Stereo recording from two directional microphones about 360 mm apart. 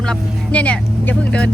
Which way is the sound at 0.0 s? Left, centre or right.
Centre.